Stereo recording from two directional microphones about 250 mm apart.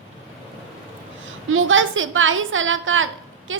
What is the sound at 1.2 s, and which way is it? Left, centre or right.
A woman's voice, right.